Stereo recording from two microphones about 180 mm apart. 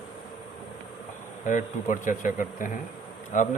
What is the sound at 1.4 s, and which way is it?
Speech, 45° left (ahead or behind).